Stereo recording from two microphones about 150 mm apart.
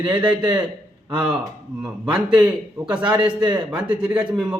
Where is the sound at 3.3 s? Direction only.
30° right (ahead or behind).